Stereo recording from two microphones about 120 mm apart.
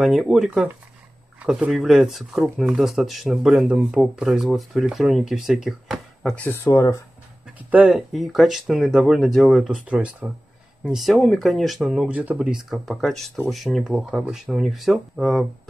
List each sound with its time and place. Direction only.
0.0 s speech: centre (ahead or behind)
6.3 s speech: 15° left (ahead or behind)
7.5 s speech: 10° right (ahead or behind)
8.1 s speech: centre (ahead or behind)